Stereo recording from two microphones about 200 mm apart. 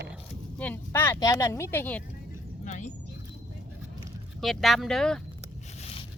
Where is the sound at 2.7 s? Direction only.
35° left (ahead or behind).